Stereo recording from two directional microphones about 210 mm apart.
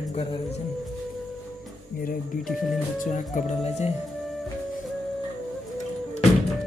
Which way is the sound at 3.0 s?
35° left (ahead or behind).